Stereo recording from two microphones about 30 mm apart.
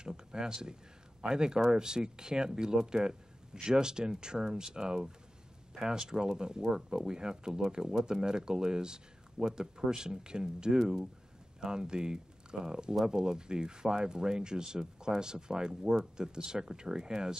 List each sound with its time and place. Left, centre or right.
0.0 s speech: right